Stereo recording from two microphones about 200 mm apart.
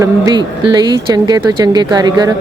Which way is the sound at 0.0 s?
20° right (ahead or behind).